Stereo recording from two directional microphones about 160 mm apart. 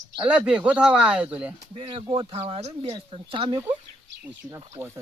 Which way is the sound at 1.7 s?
35° right (ahead or behind).